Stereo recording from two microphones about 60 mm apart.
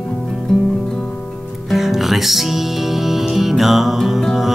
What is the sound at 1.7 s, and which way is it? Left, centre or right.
Music, centre.